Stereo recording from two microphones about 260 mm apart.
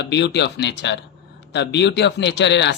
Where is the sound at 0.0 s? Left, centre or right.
Left.